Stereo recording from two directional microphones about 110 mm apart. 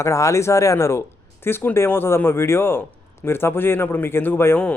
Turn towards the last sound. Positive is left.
turn(degrees=20)  # may be behind; listen again after turning